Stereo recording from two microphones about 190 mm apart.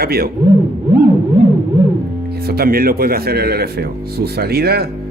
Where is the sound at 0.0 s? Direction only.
55° right (ahead or behind).